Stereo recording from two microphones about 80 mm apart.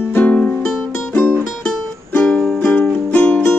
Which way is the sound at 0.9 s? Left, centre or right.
Left.